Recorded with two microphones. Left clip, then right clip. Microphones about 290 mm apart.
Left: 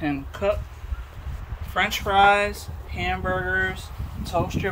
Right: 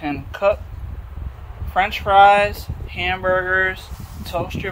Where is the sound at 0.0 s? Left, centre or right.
Centre.